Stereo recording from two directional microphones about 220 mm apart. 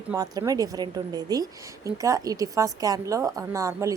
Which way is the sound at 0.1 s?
15° right (ahead or behind).